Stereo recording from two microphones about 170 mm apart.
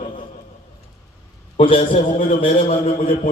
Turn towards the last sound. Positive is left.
turn(degrees=40)  # may be behind; listen again after turning